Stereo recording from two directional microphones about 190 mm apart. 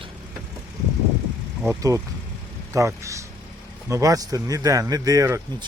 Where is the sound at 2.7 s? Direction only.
15° right (ahead or behind).